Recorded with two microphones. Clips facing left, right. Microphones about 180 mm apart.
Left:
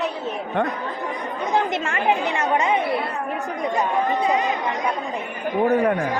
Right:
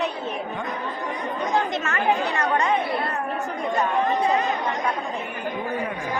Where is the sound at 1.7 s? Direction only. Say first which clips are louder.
Left 1 dB; 25° left (ahead or behind).